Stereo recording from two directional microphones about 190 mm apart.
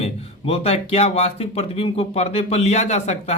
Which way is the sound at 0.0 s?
30° left (ahead or behind).